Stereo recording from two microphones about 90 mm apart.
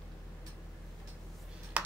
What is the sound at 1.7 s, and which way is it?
Computer keyboard, 15° right (ahead or behind).